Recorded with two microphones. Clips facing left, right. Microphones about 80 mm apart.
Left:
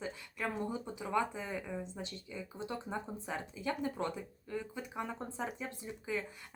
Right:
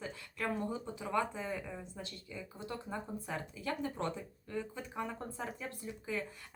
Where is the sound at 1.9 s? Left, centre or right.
Centre.